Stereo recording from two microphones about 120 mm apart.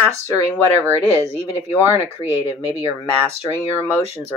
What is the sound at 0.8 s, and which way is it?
Speech, 20° right (ahead or behind).